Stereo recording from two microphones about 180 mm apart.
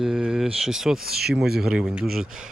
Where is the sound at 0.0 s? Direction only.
5° right (ahead or behind).